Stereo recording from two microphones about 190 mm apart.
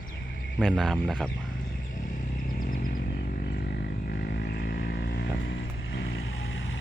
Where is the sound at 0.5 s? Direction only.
Centre (ahead or behind).